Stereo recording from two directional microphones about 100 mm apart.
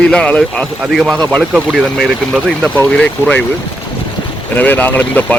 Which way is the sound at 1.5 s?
5° right (ahead or behind).